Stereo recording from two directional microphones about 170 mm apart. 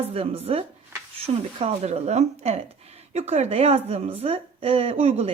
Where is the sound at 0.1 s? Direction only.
35° right (ahead or behind).